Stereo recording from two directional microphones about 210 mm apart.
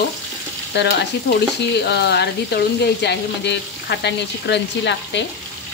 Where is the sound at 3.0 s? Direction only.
55° left (ahead or behind).